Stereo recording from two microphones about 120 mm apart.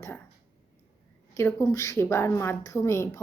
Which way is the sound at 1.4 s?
20° left (ahead or behind).